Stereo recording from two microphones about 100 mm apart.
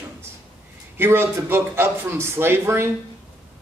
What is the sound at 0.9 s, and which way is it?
Speech, 25° right (ahead or behind).